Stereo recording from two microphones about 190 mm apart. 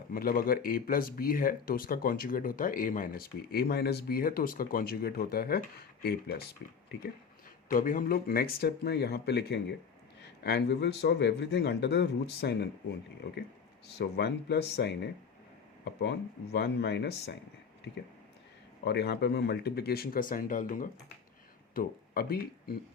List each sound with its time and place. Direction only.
0.1 s speech: 50° left (ahead or behind)
7.7 s speech: 45° left (ahead or behind); by 17.3 s 60° left (ahead or behind)
18.9 s speech: 60° left (ahead or behind)